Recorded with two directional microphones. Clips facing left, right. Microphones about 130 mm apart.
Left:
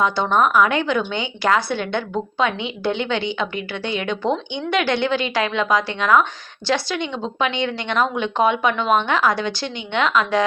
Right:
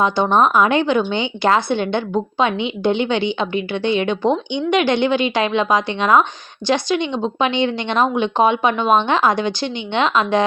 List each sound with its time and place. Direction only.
0.0 s speech: 20° right (ahead or behind)